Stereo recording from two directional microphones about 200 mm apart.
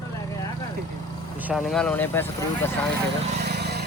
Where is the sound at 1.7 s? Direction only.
5° left (ahead or behind).